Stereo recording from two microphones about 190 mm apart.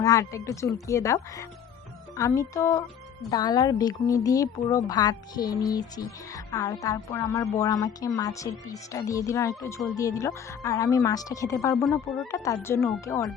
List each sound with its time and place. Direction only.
0.0 s a woman's voice: 15° left (ahead or behind)
12.0 s speech: centre (ahead or behind)
12.3 s a woman's voice: 15° left (ahead or behind)